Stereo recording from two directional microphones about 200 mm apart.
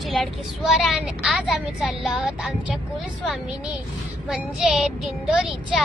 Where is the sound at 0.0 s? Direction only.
Centre (ahead or behind).